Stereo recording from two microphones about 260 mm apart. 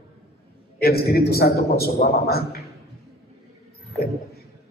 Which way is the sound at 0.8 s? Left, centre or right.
Left.